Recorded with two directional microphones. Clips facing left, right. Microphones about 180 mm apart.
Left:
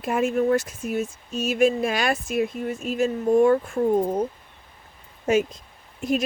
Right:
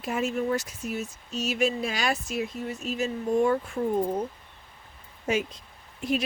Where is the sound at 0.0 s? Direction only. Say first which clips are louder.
Left 6 dB; 55° left (ahead or behind).